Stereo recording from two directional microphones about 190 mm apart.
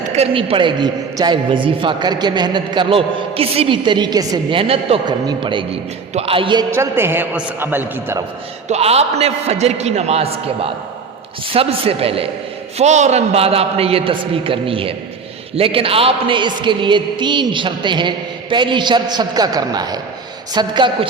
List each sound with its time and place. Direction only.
0.0 s a man's voice: 35° right (ahead or behind); by 8.2 s 10° right (ahead or behind)
8.6 s a man's voice: 35° right (ahead or behind)